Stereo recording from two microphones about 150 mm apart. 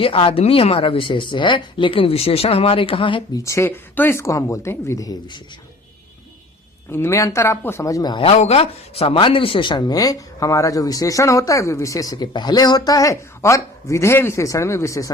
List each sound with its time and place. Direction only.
0.0 s speech: 35° left (ahead or behind)
3.4 s speech: 20° left (ahead or behind)
6.9 s speech: 20° left (ahead or behind)
8.3 s speech: 45° left (ahead or behind); by 15.1 s 20° left (ahead or behind)